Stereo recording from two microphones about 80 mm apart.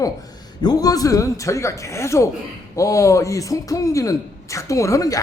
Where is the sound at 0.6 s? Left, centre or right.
Left.